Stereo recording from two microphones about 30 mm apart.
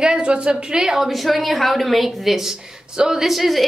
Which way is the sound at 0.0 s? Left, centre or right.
Right.